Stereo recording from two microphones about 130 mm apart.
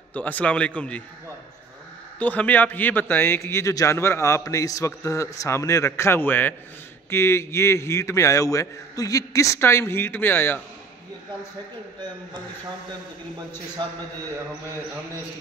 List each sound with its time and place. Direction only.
0.1 s a man's voice: 10° left (ahead or behind)
2.1 s a man's voice: 10° left (ahead or behind)
13.8 s a man's voice: 35° right (ahead or behind)